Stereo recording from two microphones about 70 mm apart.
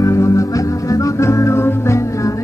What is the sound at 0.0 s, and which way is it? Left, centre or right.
Music, left.